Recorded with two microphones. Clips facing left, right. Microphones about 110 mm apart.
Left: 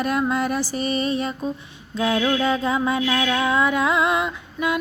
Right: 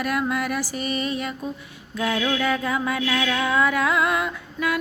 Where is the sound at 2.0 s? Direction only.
20° left (ahead or behind).